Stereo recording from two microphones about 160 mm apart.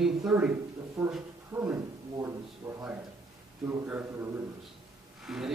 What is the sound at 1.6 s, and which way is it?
A man's voice, 15° right (ahead or behind).